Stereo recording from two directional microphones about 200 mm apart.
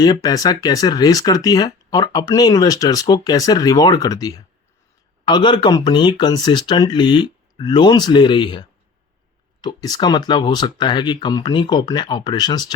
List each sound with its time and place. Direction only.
0.0 s speech: 20° left (ahead or behind)